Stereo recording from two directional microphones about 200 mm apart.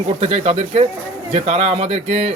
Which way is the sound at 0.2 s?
30° right (ahead or behind).